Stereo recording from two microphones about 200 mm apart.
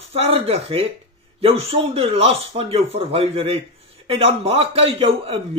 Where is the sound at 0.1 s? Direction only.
30° right (ahead or behind).